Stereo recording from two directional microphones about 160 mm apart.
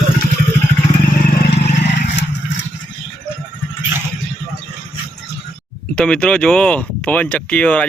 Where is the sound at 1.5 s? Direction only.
90° left.